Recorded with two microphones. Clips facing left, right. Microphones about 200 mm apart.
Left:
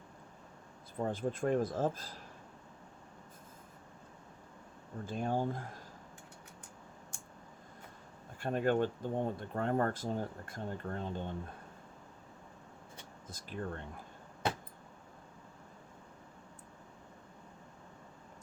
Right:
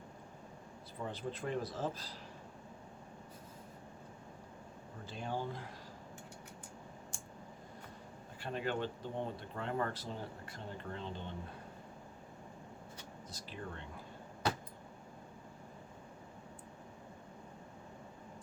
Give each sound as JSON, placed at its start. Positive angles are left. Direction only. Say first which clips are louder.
{"t": 0.9, "sound": "speech", "louder": "left 7 dB", "side_deg": 50}
{"t": 5.0, "sound": "speech", "louder": "left 6 dB", "side_deg": 50}
{"t": 8.4, "sound": "speech", "louder": "left 7 dB", "side_deg": 50}
{"t": 13.2, "sound": "speech", "louder": "left 6 dB", "side_deg": 50}